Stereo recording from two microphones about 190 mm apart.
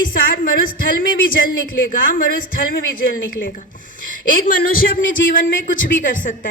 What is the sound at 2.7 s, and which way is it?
A woman's voice, 55° left (ahead or behind).